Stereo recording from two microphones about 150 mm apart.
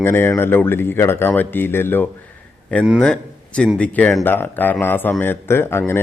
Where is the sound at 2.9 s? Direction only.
5° left (ahead or behind).